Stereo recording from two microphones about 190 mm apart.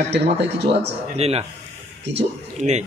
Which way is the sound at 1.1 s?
30° right (ahead or behind).